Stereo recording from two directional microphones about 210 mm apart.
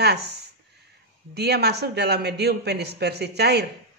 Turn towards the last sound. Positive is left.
turn(degrees=-50)  # may be behind; listen again after turning